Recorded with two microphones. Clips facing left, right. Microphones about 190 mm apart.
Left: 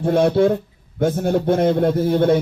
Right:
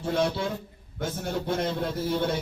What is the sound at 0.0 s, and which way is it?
A man's voice, 55° left (ahead or behind).